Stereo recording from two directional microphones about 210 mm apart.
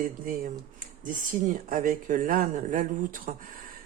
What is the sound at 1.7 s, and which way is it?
Speech, 40° right (ahead or behind).